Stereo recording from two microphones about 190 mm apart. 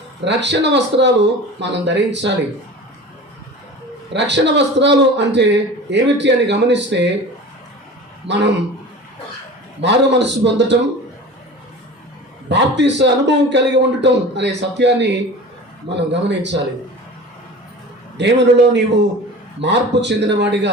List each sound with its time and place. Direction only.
0.3 s speech: 65° right (ahead or behind)
4.1 s a man's voice: 65° right (ahead or behind)
8.3 s speech: 65° right (ahead or behind)
9.8 s speech: 65° right (ahead or behind)
12.5 s a man's voice: 65° right (ahead or behind)
18.2 s a man's voice: 65° right (ahead or behind)